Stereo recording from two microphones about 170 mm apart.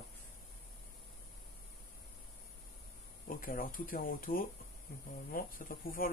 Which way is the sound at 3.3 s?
55° left (ahead or behind).